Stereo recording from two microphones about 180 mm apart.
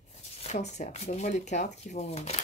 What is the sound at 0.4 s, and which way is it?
Speech, 40° left (ahead or behind).